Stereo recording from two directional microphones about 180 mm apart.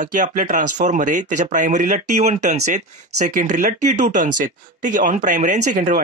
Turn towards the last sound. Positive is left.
turn(degrees=-45)  # may be behind; listen again after turning